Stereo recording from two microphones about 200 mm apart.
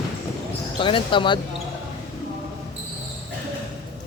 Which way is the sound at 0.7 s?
25° left (ahead or behind).